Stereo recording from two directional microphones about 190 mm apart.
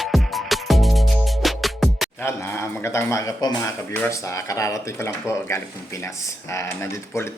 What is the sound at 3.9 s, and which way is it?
Speech, 10° left (ahead or behind).